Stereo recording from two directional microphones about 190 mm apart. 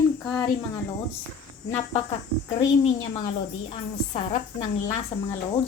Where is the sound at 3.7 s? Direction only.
30° left (ahead or behind).